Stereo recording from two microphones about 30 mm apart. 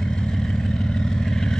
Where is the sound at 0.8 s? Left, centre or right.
Left.